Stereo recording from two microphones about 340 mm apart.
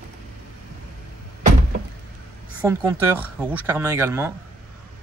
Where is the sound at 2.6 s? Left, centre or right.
Centre.